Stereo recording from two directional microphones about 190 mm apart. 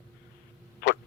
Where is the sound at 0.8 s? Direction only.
50° left (ahead or behind).